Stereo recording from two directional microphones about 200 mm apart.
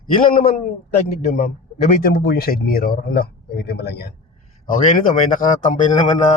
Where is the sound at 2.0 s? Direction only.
50° left (ahead or behind).